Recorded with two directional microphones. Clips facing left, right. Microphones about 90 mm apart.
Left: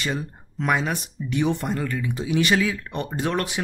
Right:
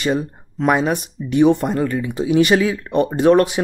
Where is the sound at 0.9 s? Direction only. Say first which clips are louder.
Right 9 dB; 15° right (ahead or behind).